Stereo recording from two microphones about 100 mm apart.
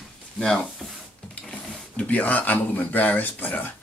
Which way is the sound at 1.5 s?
15° left (ahead or behind).